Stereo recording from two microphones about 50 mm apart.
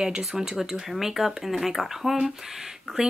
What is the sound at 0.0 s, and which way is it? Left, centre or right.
Speech, centre.